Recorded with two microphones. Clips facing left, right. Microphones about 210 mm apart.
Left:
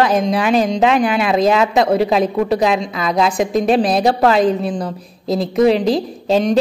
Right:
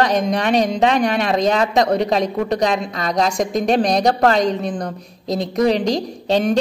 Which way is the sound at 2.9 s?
40° right (ahead or behind).